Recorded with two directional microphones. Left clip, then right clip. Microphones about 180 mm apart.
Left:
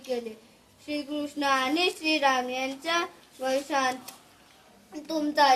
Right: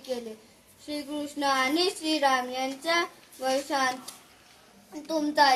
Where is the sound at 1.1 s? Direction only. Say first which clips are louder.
Even; 15° left (ahead or behind).